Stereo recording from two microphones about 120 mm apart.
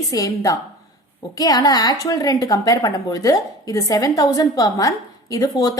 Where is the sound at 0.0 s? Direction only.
30° left (ahead or behind).